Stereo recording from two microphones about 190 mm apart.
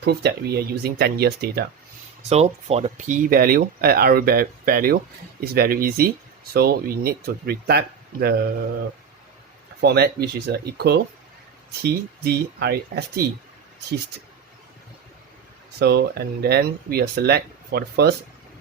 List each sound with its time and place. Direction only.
0.0 s speech: 60° right (ahead or behind)
2.3 s speech: 35° right (ahead or behind); by 8.3 s 55° right (ahead or behind)
9.8 s speech: 55° right (ahead or behind)
15.8 s speech: 60° right (ahead or behind)